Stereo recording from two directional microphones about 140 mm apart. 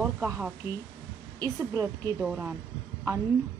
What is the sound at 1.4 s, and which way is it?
Speech, 25° right (ahead or behind).